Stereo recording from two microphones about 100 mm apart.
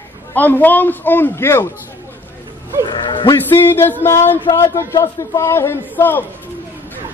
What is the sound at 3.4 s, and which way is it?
A man's voice, 20° left (ahead or behind).